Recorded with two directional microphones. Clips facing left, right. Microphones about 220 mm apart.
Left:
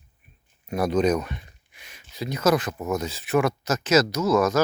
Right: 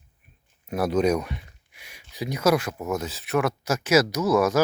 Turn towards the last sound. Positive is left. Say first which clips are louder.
# even
turn(degrees=-15)  # may be behind; listen again after turning